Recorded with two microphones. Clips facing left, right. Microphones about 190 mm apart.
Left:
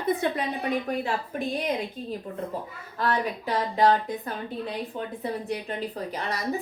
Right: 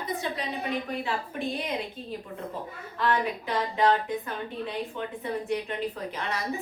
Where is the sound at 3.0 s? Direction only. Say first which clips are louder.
Even; 40° left (ahead or behind).